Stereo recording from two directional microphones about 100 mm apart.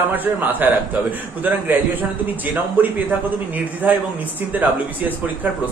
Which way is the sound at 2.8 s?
20° right (ahead or behind).